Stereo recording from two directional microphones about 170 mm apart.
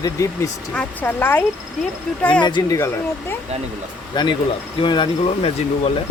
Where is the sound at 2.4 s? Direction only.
25° left (ahead or behind).